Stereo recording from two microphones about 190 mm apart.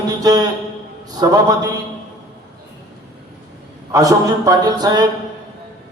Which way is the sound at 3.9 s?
20° right (ahead or behind).